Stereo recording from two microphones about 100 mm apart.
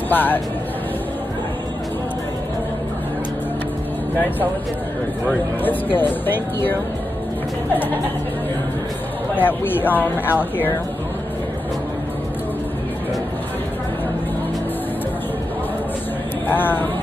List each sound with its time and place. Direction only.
0.1 s speech: 20° left (ahead or behind)
5.9 s speech: 20° left (ahead or behind)
9.3 s speech: 20° left (ahead or behind)
16.4 s speech: 20° left (ahead or behind)